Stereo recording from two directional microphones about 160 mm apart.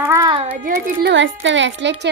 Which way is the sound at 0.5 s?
60° right (ahead or behind).